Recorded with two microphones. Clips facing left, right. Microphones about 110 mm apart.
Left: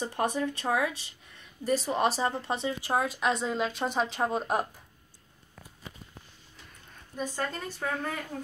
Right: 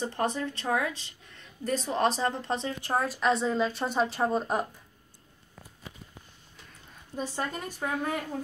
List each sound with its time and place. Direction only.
0.1 s speech: 15° left (ahead or behind)
7.1 s a woman's voice: 25° right (ahead or behind)
7.5 s speech: 15° right (ahead or behind)